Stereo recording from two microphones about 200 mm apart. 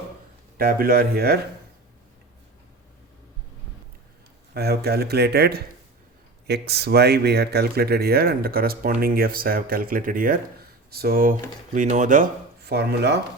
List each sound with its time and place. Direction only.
0.5 s speech: 45° right (ahead or behind)
4.5 s speech: 50° right (ahead or behind)